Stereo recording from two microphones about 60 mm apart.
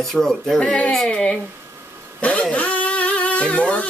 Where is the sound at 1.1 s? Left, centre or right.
Centre.